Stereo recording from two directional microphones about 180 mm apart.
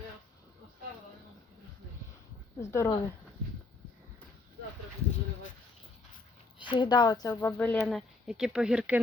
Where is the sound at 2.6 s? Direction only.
15° left (ahead or behind).